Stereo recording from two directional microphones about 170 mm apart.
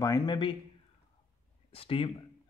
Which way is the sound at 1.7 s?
35° left (ahead or behind).